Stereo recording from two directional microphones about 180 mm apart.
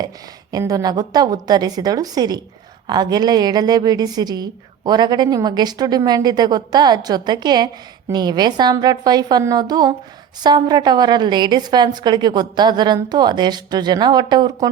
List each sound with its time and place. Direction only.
0.5 s a woman's voice: 20° right (ahead or behind)